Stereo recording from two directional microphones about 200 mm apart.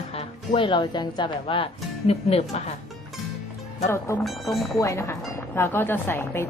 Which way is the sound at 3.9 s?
15° left (ahead or behind).